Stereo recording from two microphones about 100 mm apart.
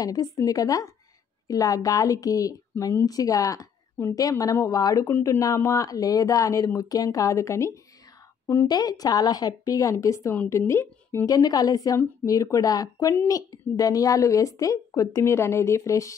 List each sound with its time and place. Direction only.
0.0 s speech: 40° left (ahead or behind)
11.2 s speech: 40° left (ahead or behind)